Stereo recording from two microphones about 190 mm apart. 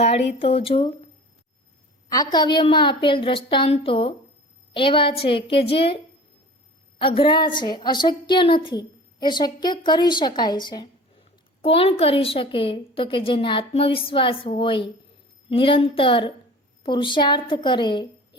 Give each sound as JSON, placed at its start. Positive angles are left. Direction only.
{"t": 0.3, "sound": "a woman's voice", "side_deg": 30}
{"t": 7.0, "sound": "a woman's voice", "side_deg": 30}